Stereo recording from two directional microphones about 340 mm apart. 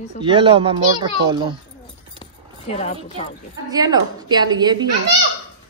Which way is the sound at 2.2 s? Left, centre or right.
Centre.